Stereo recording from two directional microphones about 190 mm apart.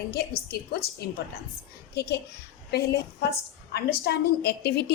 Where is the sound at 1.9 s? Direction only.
60° left (ahead or behind).